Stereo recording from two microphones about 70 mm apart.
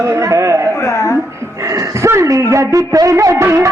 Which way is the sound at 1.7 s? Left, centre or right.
Right.